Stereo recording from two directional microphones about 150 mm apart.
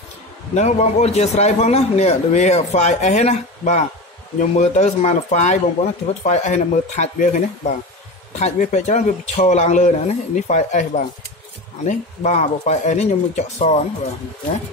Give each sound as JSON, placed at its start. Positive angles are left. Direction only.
{"t": 0.6, "sound": "a man's voice", "side_deg": 50}